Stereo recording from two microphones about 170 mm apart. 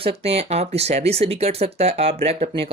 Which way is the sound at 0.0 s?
35° right (ahead or behind).